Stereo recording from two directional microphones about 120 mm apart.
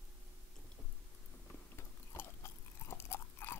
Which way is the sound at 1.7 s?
20° left (ahead or behind).